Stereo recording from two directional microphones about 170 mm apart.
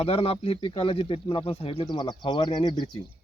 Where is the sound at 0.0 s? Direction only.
35° left (ahead or behind).